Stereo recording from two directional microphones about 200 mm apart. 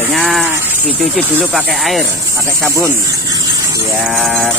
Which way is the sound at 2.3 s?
15° right (ahead or behind).